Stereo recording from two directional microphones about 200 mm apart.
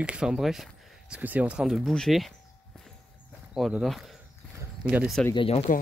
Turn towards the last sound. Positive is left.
turn(degrees=30)  # may be behind; listen again after turning